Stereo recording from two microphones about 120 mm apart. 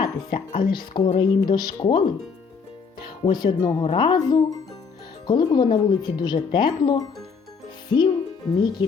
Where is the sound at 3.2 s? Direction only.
40° left (ahead or behind).